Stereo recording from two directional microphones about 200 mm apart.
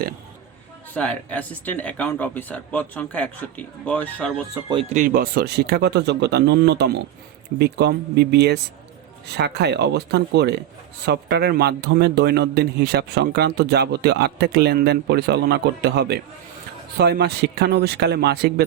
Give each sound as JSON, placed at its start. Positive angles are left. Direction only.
{"t": 0.9, "sound": "speech", "side_deg": 5}
{"t": 4.7, "sound": "speech", "side_deg": -30}